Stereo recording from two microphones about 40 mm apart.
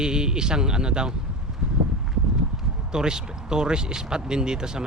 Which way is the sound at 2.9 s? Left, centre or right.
Centre.